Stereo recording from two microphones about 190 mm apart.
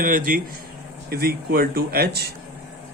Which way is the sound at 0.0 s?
45° right (ahead or behind).